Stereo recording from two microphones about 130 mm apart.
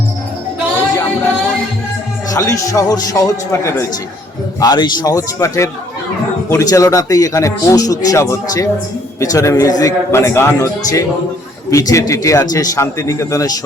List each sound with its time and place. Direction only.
2.3 s a man's voice: 25° left (ahead or behind)